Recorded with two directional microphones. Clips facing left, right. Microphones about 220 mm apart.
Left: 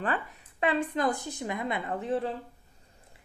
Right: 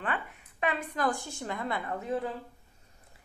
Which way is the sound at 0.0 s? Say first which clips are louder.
Left 3 dB; 40° left (ahead or behind).